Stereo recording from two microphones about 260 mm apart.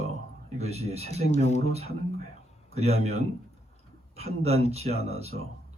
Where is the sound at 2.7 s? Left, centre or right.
Right.